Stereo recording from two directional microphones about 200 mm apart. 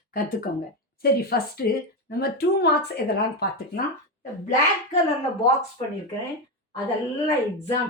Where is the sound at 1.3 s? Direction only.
50° left (ahead or behind).